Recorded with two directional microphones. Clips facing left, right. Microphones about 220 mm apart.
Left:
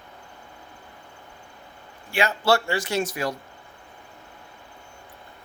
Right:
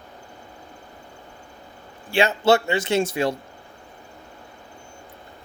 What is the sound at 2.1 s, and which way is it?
Speech, 25° right (ahead or behind).